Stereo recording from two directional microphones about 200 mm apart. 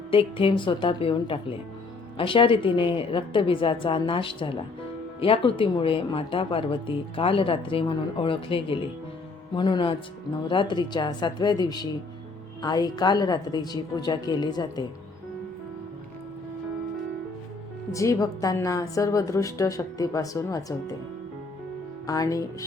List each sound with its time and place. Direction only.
0.1 s a woman's voice: 25° left (ahead or behind)
17.9 s a woman's voice: 15° left (ahead or behind)
22.0 s speech: 20° left (ahead or behind)